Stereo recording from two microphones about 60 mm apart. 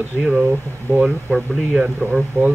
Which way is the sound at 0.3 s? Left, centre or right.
Right.